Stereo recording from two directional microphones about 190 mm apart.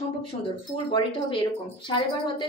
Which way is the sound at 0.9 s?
25° left (ahead or behind).